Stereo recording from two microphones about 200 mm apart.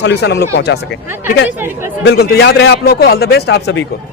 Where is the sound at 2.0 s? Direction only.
55° left (ahead or behind).